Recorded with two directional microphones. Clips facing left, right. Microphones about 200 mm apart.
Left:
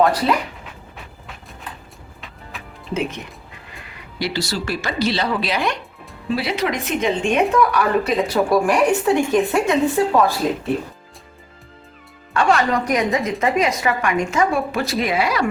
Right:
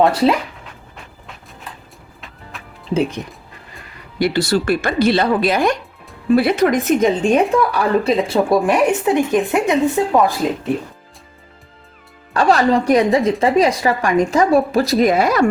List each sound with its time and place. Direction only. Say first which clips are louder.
0.0 s speech: right 3 dB; 30° right (ahead or behind)
2.2 s music: even; centre (ahead or behind)
2.9 s speech: right 6 dB; 35° right (ahead or behind)
4.2 s a woman's voice: right 7 dB; 55° right (ahead or behind); by 10.3 s 20° right (ahead or behind)
12.3 s speech: right 4 dB; 35° right (ahead or behind)